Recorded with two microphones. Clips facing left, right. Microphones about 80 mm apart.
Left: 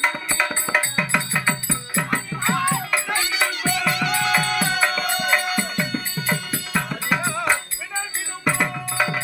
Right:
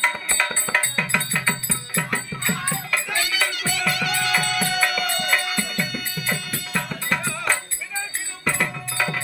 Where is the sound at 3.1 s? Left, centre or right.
Left.